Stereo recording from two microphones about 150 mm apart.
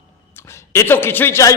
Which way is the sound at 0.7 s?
15° left (ahead or behind).